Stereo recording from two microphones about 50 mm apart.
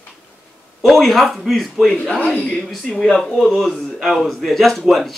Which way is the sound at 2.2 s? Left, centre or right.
Left.